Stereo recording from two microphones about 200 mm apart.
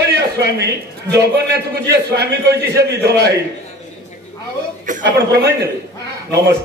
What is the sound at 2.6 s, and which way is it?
Music, 55° right (ahead or behind).